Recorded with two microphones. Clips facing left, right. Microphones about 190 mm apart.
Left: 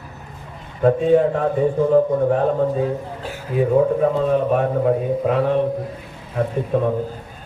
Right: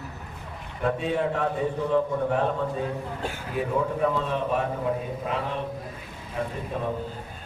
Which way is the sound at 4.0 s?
45° left (ahead or behind).